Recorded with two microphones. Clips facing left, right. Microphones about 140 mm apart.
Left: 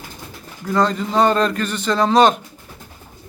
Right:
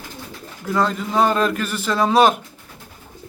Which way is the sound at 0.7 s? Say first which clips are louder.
Left 2 dB; 5° right (ahead or behind).